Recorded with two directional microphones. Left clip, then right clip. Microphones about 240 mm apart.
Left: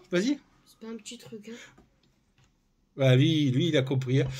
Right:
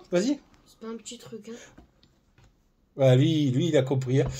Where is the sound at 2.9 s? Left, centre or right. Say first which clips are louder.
Right 3 dB; left.